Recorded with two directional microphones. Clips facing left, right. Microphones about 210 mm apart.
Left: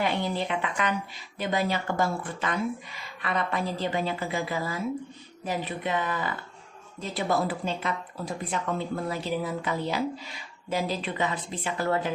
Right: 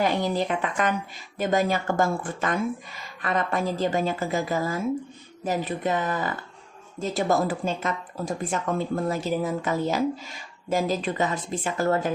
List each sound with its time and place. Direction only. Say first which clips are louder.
0.0 s a woman's voice: right 4 dB; 40° right (ahead or behind)